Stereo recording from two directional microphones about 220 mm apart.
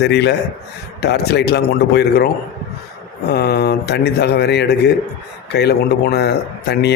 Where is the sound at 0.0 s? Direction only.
50° left (ahead or behind).